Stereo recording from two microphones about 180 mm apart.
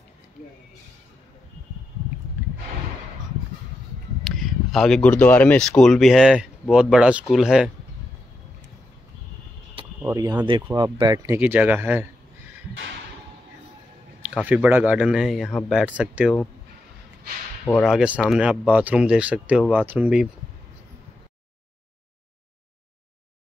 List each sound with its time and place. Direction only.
4.2 s speech: centre (ahead or behind)
10.0 s speech: 20° right (ahead or behind)
11.3 s speech: 10° right (ahead or behind)
14.3 s speech: 5° right (ahead or behind)
17.8 s speech: 5° right (ahead or behind)